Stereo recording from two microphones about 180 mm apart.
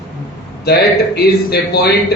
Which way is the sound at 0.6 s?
60° left (ahead or behind).